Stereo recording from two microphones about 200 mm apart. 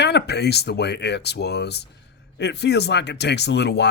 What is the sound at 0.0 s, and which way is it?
Speech, 55° left (ahead or behind).